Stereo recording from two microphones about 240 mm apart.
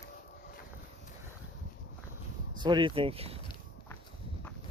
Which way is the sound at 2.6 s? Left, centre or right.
Centre.